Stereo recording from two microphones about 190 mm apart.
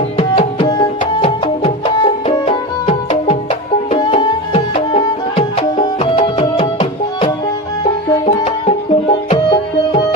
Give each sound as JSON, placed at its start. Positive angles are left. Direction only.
{"t": 0.2, "sound": "tabla", "side_deg": 25}
{"t": 1.2, "sound": "music", "side_deg": 30}